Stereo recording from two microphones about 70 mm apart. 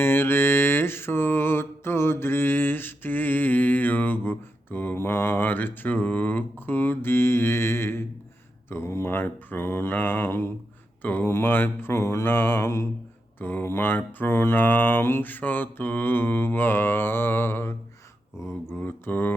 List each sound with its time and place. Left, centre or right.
0.0 s music: left
8.7 s speech: left
13.4 s speech: left
18.7 s mantra: left